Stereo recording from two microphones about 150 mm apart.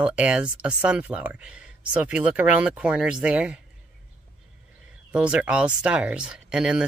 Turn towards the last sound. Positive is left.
turn(degrees=-5)  # may be behind; listen again after turning